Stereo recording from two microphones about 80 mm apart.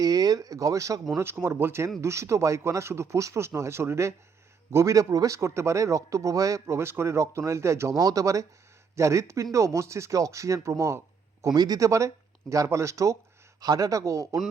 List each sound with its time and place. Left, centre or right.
0.0 s speech: right
1.2 s speech: right
7.9 s speech: right
11.4 s a man's voice: right
11.9 s speech: right
13.6 s speech: right